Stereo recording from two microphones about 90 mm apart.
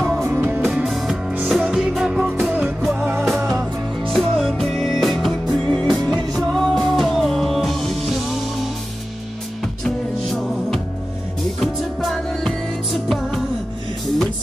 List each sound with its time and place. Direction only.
0.2 s music: 25° right (ahead or behind)
0.7 s music: centre (ahead or behind)
9.8 s music: 5° left (ahead or behind)